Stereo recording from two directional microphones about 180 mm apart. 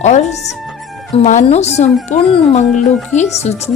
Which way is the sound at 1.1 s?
40° left (ahead or behind).